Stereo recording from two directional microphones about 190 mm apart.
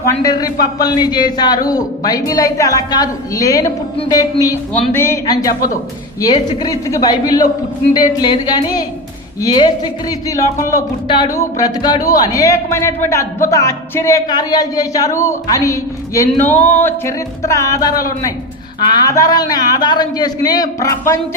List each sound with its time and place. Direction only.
0.0 s a man's voice: 20° left (ahead or behind)